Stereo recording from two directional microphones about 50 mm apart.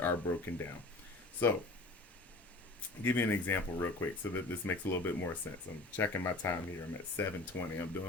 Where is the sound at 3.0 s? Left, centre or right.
Left.